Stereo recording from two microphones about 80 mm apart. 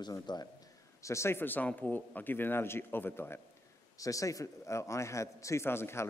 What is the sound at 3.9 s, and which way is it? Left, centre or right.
A man's voice, left.